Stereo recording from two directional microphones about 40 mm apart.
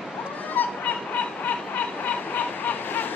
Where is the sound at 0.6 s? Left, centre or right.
Left.